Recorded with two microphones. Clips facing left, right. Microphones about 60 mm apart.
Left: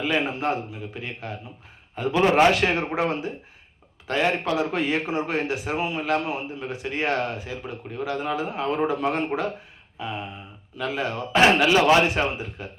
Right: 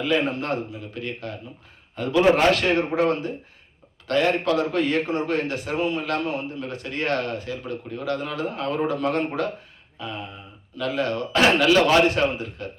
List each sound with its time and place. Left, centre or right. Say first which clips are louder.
0.0 s a man's voice: right 1 dB; centre